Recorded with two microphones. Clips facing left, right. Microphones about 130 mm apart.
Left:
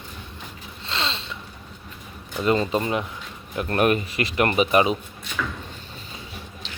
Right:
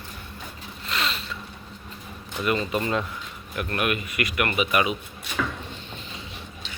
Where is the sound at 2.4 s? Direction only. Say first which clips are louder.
Left 4 dB; 30° left (ahead or behind).